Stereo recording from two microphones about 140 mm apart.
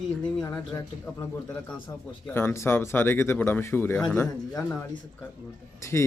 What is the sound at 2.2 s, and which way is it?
Speech, 15° left (ahead or behind).